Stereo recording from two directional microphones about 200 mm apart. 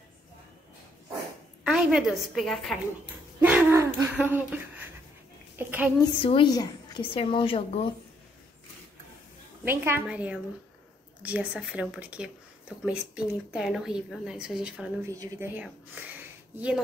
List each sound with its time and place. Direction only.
1.6 s a woman's voice: 5° right (ahead or behind)
3.3 s a sound: 10° right (ahead or behind)
5.6 s a woman's voice: 10° right (ahead or behind)
6.2 s a woman's voice: 25° left (ahead or behind)
9.7 s a woman's voice: 10° right (ahead or behind)